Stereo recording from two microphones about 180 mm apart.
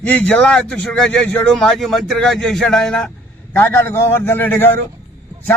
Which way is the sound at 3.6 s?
15° left (ahead or behind).